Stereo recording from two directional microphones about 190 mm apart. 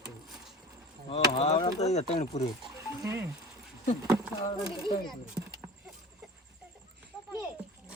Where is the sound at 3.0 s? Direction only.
15° right (ahead or behind).